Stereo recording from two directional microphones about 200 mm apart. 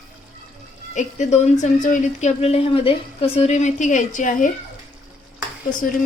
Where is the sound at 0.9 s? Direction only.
35° left (ahead or behind).